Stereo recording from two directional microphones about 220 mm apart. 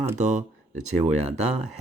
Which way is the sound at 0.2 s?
35° right (ahead or behind).